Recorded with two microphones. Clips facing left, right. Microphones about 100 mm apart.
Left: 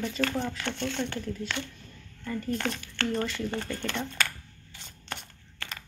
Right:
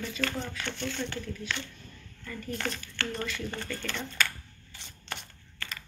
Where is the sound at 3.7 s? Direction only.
20° left (ahead or behind).